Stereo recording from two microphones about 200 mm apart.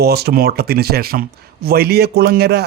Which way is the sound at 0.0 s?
50° right (ahead or behind).